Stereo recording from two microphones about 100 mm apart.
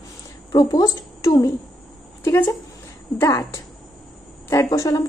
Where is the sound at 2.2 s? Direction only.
25° left (ahead or behind).